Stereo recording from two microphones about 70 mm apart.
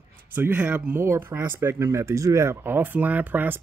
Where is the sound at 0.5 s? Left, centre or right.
Centre.